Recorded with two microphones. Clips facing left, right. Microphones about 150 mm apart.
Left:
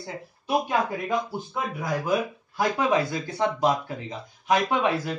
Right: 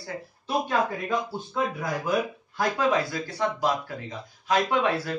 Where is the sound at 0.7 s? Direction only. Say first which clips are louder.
Even; 15° left (ahead or behind).